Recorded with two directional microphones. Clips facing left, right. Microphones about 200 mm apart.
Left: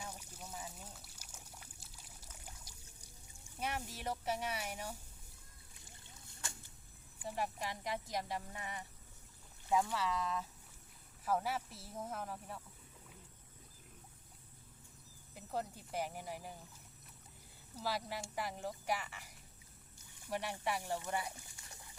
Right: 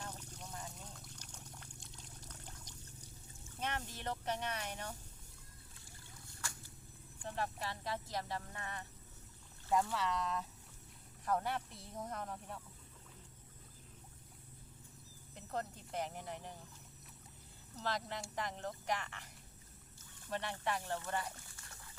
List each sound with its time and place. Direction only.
0.0 s a sound: 10° left (ahead or behind)
3.4 s speech: 10° left (ahead or behind)
5.7 s a sound: 20° left (ahead or behind)
7.2 s speech: 10° left (ahead or behind)
9.9 s speech: centre (ahead or behind)
15.4 s speech: 5° left (ahead or behind)
17.7 s speech: 10° left (ahead or behind)